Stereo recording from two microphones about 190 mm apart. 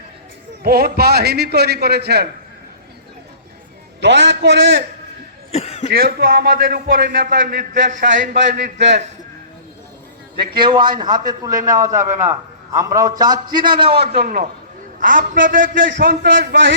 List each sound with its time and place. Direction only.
0.6 s a man's voice: 55° right (ahead or behind)
4.0 s a man's voice: 65° right (ahead or behind)
5.5 s cough: 35° left (ahead or behind)
5.9 s a man's voice: 55° right (ahead or behind)
10.6 s a man's voice: 25° right (ahead or behind)
14.2 s a man's voice: 45° right (ahead or behind)